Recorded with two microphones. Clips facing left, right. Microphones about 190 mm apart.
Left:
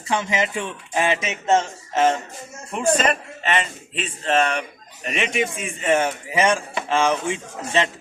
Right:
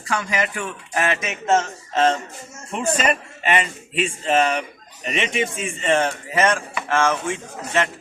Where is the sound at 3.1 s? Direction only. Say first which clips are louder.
Right 2 dB; 10° right (ahead or behind).